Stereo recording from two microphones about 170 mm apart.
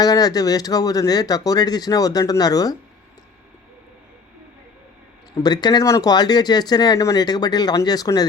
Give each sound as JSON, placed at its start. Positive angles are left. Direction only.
{"t": 0.0, "sound": "speech", "side_deg": 20}
{"t": 5.3, "sound": "speech", "side_deg": 25}